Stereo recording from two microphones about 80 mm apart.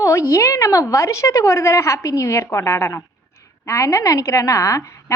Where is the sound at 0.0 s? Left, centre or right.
Left.